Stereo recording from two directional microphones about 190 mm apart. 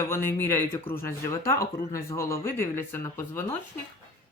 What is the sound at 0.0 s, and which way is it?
A man's voice, 15° left (ahead or behind).